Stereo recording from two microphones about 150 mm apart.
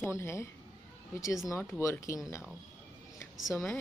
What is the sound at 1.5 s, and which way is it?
Speech, 20° left (ahead or behind).